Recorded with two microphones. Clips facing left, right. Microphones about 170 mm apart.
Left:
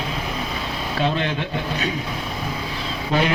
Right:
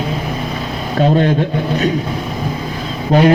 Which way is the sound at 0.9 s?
45° right (ahead or behind).